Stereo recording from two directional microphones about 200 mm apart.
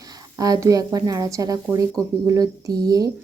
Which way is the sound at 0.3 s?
15° right (ahead or behind).